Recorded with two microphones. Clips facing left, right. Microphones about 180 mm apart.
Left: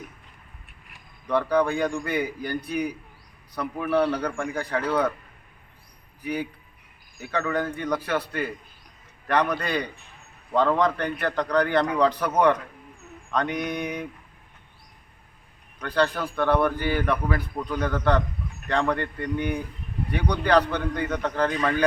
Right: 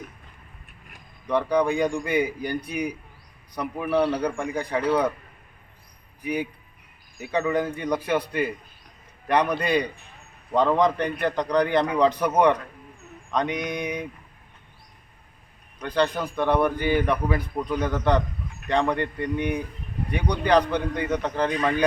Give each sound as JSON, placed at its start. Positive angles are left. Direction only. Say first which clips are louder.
{"t": 1.3, "sound": "a man's voice", "louder": "even", "side_deg": -15}
{"t": 6.2, "sound": "a man's voice", "louder": "right 2 dB", "side_deg": -15}
{"t": 16.0, "sound": "a man's voice", "louder": "even", "side_deg": -15}